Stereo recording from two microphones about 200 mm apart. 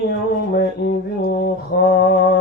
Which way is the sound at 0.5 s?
55° left (ahead or behind).